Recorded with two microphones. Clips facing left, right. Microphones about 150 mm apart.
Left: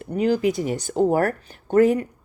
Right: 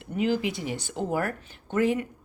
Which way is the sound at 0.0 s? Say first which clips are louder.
Left 6 dB; 40° left (ahead or behind).